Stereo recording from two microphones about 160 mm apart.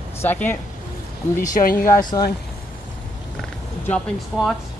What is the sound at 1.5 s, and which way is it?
Speech, 65° left (ahead or behind).